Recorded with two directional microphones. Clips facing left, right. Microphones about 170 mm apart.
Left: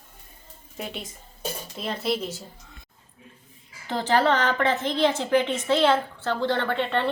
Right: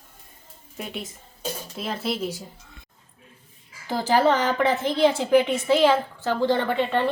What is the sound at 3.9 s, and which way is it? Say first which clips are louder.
A woman's voice: right 2 dB; 10° right (ahead or behind).